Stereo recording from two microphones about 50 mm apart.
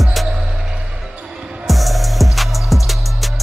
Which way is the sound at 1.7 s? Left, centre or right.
Centre.